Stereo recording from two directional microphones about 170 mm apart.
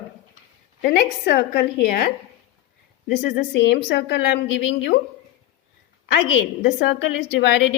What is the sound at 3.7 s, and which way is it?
A woman's voice, 75° left (ahead or behind).